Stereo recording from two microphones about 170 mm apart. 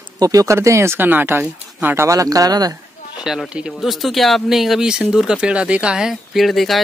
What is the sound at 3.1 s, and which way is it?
Speech, 5° right (ahead or behind).